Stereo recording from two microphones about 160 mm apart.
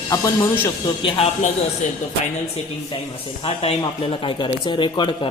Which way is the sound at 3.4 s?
35° left (ahead or behind).